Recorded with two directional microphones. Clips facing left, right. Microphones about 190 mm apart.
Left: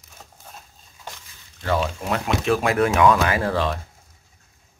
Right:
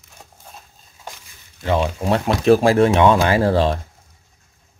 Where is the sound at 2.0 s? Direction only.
30° right (ahead or behind).